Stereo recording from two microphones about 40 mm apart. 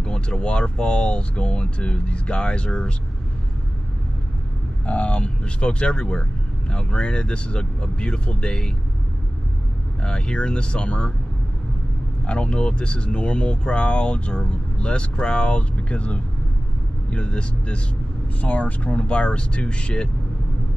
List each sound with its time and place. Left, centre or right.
0.0 s speech: left
4.8 s speech: left
10.0 s speech: left
12.3 s speech: left
18.4 s speech: left